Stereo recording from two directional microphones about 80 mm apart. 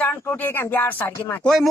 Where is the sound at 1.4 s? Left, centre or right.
Centre.